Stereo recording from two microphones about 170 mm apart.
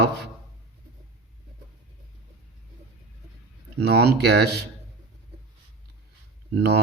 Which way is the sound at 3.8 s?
75° right (ahead or behind).